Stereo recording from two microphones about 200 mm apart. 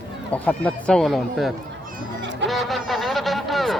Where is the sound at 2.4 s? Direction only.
Centre (ahead or behind).